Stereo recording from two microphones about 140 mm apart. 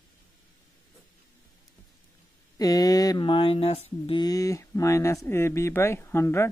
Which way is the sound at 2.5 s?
25° left (ahead or behind).